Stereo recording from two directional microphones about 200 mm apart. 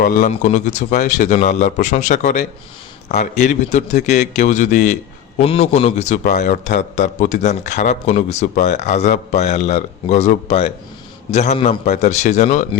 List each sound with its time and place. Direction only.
0.0 s a man's voice: 40° left (ahead or behind)